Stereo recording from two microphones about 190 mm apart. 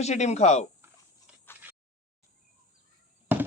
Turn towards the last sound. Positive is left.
turn(degrees=-10)  # may be behind; listen again after turning